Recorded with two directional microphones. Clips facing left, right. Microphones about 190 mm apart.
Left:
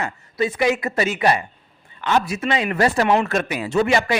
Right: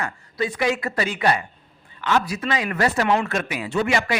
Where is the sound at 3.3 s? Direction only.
40° left (ahead or behind).